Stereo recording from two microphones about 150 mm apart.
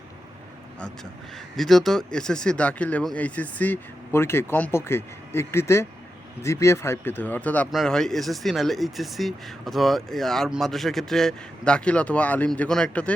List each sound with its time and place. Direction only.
1.5 s speech: centre (ahead or behind)